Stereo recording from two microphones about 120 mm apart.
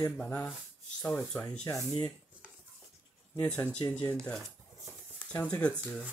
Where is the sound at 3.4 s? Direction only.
10° left (ahead or behind).